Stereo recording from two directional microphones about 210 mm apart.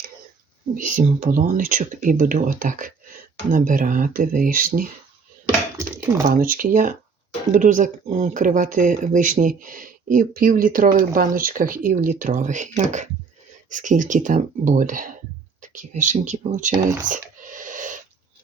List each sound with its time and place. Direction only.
0.8 s speech: 40° right (ahead or behind)
6.2 s speech: 40° right (ahead or behind)
17.1 s a sound: 40° right (ahead or behind)